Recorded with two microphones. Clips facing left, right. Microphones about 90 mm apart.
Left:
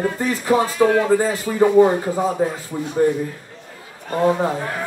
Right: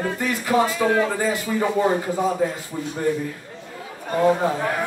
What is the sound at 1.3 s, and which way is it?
Speech, 30° left (ahead or behind).